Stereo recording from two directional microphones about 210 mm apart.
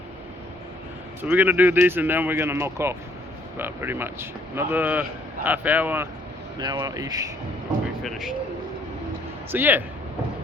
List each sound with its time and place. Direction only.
1.2 s speech: 10° right (ahead or behind)
6.6 s speech: 20° right (ahead or behind)
8.0 s a man's voice: centre (ahead or behind)
9.5 s speech: 10° right (ahead or behind)